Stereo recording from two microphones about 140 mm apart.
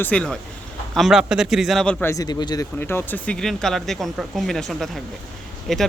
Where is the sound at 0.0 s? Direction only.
10° left (ahead or behind).